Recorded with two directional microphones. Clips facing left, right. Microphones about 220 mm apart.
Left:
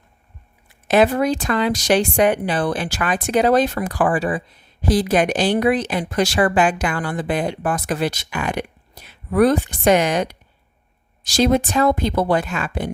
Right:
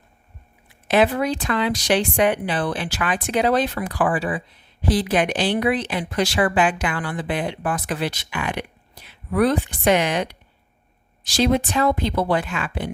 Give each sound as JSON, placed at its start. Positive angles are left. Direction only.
{"t": 0.9, "sound": "speech", "side_deg": 45}